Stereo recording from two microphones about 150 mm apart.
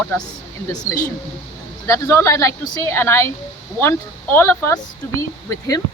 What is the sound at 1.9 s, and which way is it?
Speech, 20° left (ahead or behind).